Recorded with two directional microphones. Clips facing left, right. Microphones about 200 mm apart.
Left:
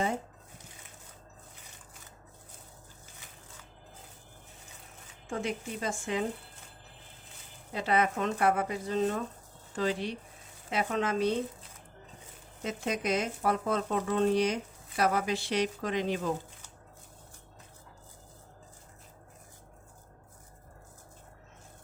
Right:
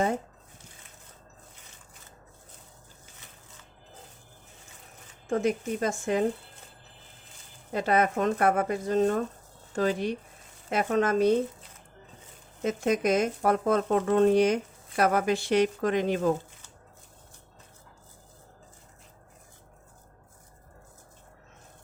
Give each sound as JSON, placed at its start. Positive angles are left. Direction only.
{"t": 5.3, "sound": "speech", "side_deg": -45}
{"t": 7.7, "sound": "speech", "side_deg": -45}
{"t": 12.6, "sound": "speech", "side_deg": -50}